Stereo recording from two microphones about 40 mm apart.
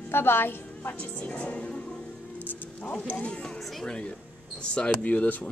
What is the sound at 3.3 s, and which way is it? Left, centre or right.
Music, left.